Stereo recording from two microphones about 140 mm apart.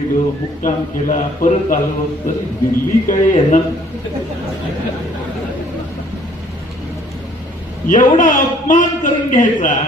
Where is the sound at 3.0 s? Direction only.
65° left (ahead or behind).